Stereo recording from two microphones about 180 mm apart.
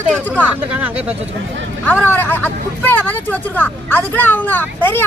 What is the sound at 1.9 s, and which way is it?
Speech, 10° left (ahead or behind).